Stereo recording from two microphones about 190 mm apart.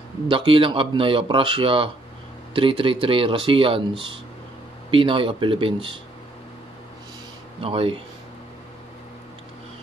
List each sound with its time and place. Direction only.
0.3 s speech: 25° right (ahead or behind)
7.6 s speech: 30° right (ahead or behind)